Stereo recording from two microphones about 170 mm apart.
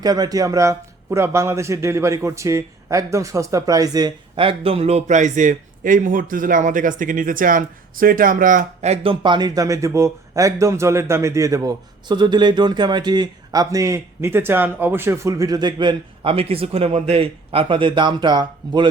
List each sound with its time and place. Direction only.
0.0 s a man's voice: 25° right (ahead or behind); by 9.1 s 40° right (ahead or behind)
9.2 s speech: 25° right (ahead or behind)